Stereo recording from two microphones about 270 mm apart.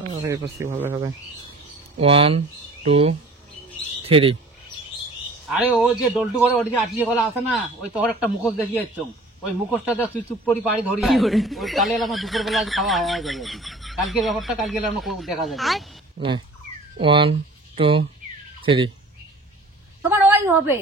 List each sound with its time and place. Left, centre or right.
0.1 s speech: centre
2.0 s speech: right
5.5 s a man's voice: centre
9.7 s a man's voice: centre
16.2 s speech: centre
20.0 s a woman's voice: centre